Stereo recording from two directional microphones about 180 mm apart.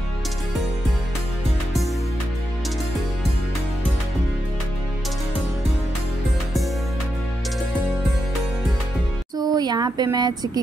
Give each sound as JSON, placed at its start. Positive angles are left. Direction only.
{"t": 9.4, "sound": "speech", "side_deg": -20}